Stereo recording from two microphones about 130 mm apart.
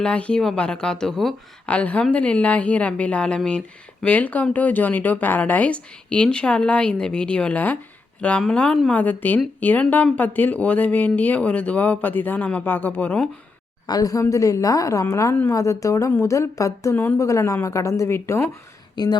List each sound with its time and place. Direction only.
0.0 s speech: 10° left (ahead or behind)
13.8 s speech: 30° left (ahead or behind)
19.0 s speech: 35° left (ahead or behind)